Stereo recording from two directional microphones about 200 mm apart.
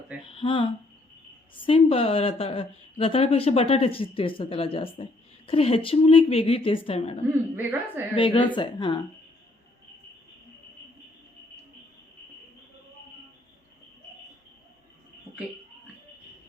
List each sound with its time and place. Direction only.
0.3 s a woman's voice: 25° left (ahead or behind)
7.5 s a woman's voice: 10° right (ahead or behind)
8.1 s a woman's voice: 25° left (ahead or behind)